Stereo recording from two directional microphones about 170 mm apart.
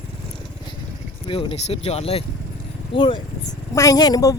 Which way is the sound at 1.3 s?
30° left (ahead or behind).